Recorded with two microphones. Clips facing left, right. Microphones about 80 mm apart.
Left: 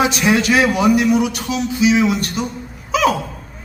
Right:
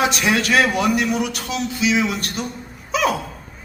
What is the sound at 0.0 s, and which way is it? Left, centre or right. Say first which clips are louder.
A man's voice: left 3 dB; centre.